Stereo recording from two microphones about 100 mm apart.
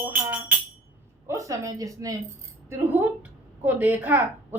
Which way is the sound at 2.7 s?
20° right (ahead or behind).